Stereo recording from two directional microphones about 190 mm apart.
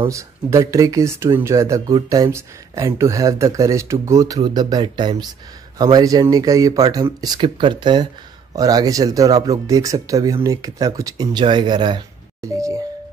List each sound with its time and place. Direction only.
0.1 s speech: 15° right (ahead or behind)